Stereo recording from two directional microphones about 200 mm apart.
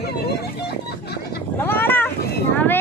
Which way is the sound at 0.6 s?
55° left (ahead or behind).